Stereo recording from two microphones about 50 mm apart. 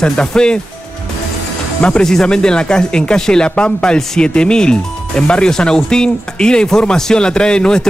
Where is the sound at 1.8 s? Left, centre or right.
Left.